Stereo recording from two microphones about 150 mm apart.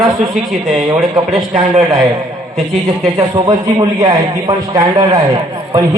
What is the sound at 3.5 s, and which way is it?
A man's voice, 25° right (ahead or behind).